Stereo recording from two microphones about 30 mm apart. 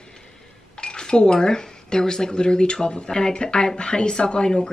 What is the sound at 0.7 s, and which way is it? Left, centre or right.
Speech, left.